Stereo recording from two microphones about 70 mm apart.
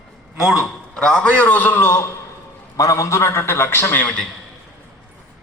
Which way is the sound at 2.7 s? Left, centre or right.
Left.